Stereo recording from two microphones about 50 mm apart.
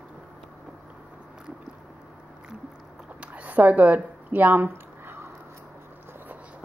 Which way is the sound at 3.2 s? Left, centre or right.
Right.